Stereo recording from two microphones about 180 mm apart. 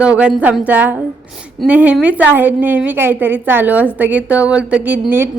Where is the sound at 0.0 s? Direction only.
5° right (ahead or behind).